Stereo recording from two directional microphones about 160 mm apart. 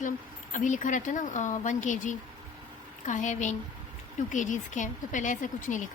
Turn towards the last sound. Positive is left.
turn(degrees=50)  # may be behind; listen again after turning